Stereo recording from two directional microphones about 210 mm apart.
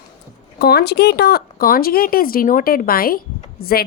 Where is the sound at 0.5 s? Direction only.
50° left (ahead or behind).